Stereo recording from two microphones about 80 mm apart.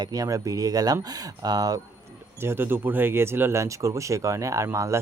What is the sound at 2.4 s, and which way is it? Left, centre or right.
Speech, right.